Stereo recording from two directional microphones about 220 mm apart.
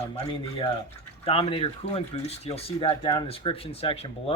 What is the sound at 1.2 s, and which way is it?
Speech, 25° left (ahead or behind).